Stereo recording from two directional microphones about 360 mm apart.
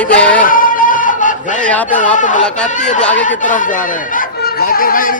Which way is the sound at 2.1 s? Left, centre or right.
Left.